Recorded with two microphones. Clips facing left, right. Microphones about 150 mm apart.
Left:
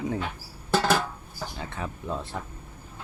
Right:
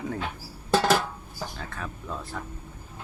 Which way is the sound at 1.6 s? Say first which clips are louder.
Left 2 dB; 20° left (ahead or behind).